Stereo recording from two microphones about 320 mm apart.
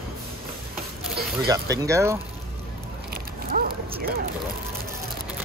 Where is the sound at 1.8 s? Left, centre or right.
Centre.